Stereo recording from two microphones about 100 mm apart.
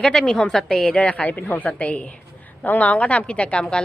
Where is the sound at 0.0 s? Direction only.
5° left (ahead or behind).